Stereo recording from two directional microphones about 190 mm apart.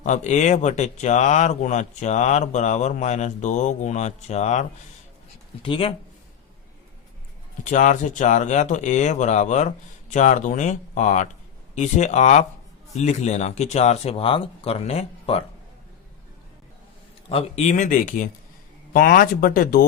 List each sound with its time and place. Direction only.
0.0 s speech: 40° left (ahead or behind)
5.6 s speech: 30° left (ahead or behind)
7.6 s speech: 40° left (ahead or behind)
17.2 s speech: 30° left (ahead or behind); by 19.8 s 50° left (ahead or behind)